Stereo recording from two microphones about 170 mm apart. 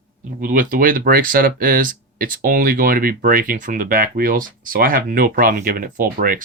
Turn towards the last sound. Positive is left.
turn(degrees=-60)  # may be behind; listen again after turning